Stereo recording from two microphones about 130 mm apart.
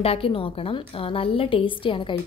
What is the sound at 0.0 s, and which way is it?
A woman's voice, 50° left (ahead or behind).